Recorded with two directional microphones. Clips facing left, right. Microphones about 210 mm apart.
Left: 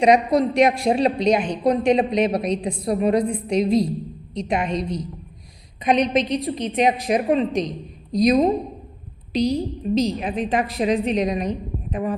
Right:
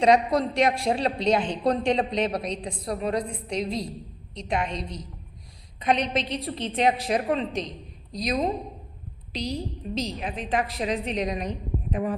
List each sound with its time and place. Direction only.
0.0 s a man's voice: 15° left (ahead or behind)